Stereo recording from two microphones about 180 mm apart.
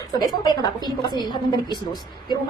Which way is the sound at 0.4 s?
25° left (ahead or behind).